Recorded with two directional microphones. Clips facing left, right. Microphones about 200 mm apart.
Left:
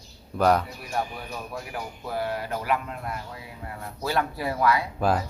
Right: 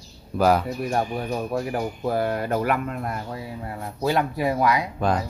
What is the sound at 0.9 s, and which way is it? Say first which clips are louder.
Speech: right 4 dB; 45° right (ahead or behind).